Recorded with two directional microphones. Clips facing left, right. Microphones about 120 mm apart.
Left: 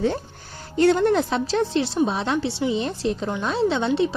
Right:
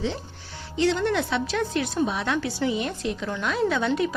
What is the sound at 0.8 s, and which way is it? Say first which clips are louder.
A woman's voice: left 5 dB; 50° left (ahead or behind).